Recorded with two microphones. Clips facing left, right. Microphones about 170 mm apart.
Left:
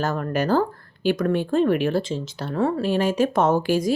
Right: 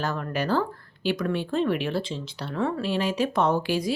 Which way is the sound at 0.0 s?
45° left (ahead or behind).